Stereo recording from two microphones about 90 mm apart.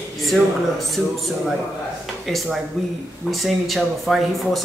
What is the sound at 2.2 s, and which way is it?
Speech, centre (ahead or behind).